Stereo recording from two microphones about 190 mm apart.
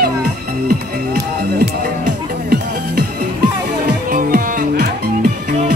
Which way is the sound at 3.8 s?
45° right (ahead or behind).